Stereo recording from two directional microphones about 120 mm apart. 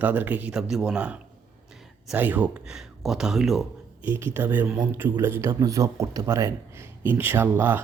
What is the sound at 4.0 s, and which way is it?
A man's voice, 15° right (ahead or behind).